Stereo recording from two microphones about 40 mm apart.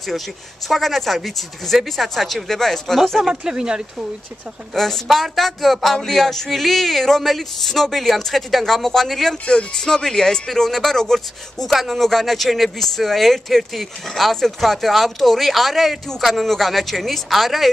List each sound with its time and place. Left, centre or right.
0.7 s speech: centre
3.2 s speech: centre
4.7 s speech: centre